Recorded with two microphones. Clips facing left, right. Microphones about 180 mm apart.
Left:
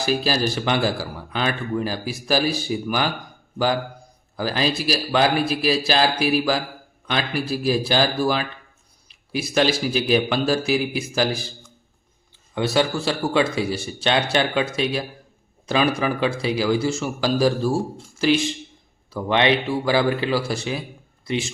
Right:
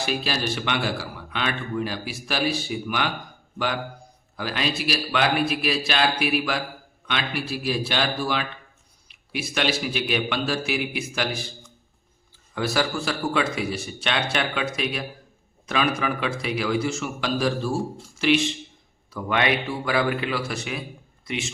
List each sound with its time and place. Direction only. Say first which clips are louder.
0.0 s a man's voice: left 5 dB; 35° left (ahead or behind)
4.4 s a man's voice: left 4 dB; 35° left (ahead or behind)
12.5 s a man's voice: left 4 dB; 25° left (ahead or behind)